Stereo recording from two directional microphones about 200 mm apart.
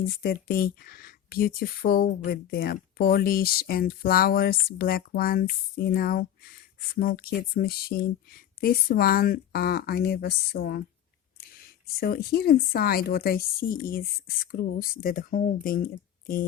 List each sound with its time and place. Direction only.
0.1 s speech: 50° left (ahead or behind)
11.9 s speech: 50° left (ahead or behind)